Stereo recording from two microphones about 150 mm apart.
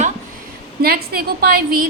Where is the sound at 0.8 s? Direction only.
90° right.